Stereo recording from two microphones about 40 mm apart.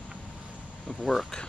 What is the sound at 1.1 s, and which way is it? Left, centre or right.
Speech, centre.